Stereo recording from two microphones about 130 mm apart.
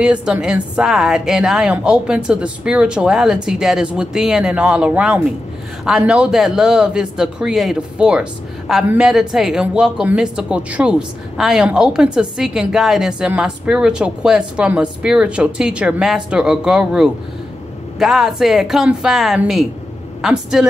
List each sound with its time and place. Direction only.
0.0 s speech: 10° right (ahead or behind)